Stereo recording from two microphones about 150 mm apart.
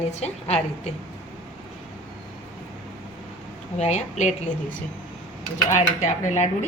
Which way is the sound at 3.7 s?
50° left (ahead or behind).